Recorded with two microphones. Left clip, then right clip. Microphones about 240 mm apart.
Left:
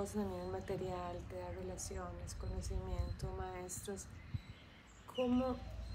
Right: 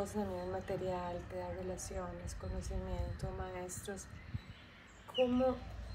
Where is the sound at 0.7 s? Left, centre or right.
Left.